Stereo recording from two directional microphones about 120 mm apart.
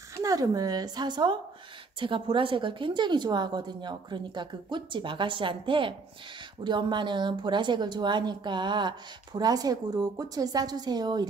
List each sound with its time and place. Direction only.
0.1 s a woman's voice: 30° right (ahead or behind)